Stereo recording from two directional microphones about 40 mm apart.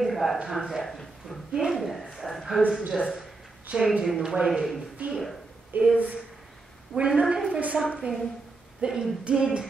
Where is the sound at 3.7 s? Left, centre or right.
Right.